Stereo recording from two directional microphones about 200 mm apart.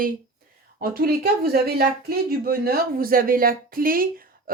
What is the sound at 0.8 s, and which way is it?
Speech, 50° right (ahead or behind).